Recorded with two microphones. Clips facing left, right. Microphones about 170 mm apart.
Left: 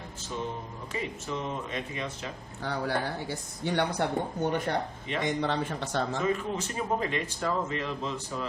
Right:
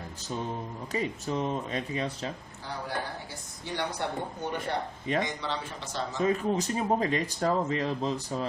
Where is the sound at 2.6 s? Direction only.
65° left (ahead or behind).